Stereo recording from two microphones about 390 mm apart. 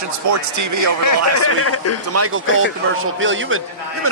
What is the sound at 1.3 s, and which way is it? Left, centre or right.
Speech, left.